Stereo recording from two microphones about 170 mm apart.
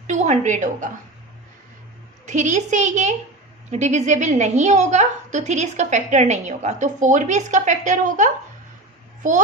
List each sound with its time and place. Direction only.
0.1 s a woman's voice: 45° right (ahead or behind)
2.2 s a woman's voice: 45° right (ahead or behind)